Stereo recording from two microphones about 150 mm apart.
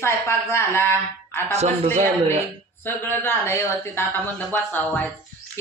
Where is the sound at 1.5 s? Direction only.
45° right (ahead or behind).